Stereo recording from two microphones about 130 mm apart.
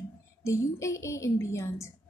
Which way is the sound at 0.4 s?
25° left (ahead or behind).